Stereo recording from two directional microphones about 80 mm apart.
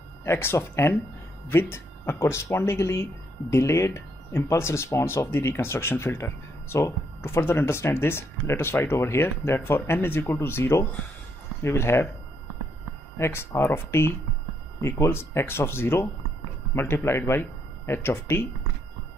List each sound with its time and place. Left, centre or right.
0.2 s speech: left
13.2 s speech: left